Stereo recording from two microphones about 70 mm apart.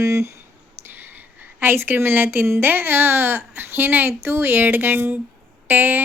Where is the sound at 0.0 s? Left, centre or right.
Right.